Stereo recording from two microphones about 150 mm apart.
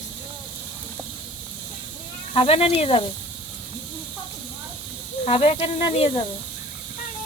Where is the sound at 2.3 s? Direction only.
40° left (ahead or behind).